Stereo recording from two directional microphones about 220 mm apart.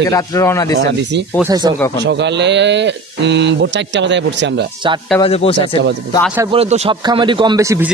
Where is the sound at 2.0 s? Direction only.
50° right (ahead or behind).